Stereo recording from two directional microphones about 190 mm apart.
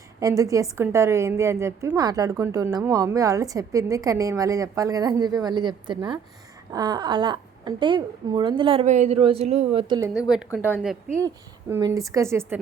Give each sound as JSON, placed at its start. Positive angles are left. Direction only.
{"t": 0.2, "sound": "a woman's voice", "side_deg": -20}
{"t": 10.2, "sound": "a woman's voice", "side_deg": -5}